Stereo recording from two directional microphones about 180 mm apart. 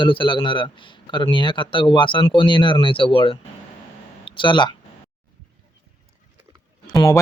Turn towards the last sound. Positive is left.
turn(degrees=20)  # may be behind; listen again after turning